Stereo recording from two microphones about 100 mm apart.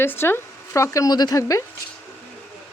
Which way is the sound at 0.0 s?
25° left (ahead or behind).